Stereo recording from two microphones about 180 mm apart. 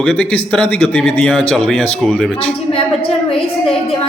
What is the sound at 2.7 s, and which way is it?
A woman's voice, 30° left (ahead or behind).